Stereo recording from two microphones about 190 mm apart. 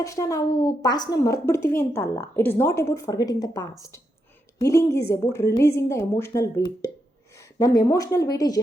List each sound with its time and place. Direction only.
0.0 s speech: 15° left (ahead or behind)